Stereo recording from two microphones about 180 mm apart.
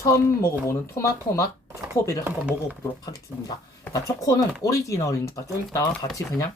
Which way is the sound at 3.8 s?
20° left (ahead or behind).